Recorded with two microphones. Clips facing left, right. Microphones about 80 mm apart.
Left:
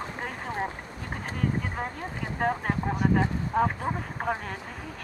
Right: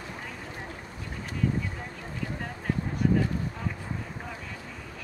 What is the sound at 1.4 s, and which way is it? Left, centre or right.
Speech, left.